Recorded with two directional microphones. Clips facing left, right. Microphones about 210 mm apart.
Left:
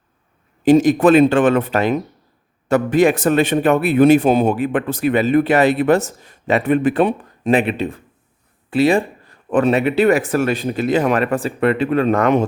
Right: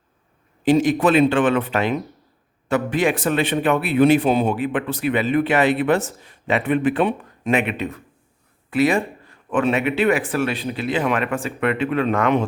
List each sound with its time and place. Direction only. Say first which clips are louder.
0.6 s speech: left 5 dB; 45° left (ahead or behind)